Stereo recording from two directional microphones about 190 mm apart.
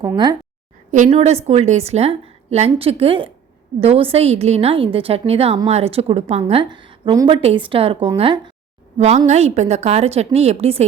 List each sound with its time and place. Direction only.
0.9 s a woman's voice: 40° right (ahead or behind)